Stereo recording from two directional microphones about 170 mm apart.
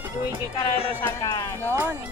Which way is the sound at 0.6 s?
35° left (ahead or behind).